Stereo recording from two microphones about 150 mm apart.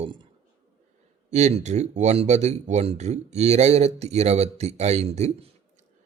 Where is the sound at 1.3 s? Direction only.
50° right (ahead or behind).